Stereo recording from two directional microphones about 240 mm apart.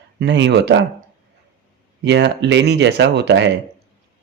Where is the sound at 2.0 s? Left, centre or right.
Right.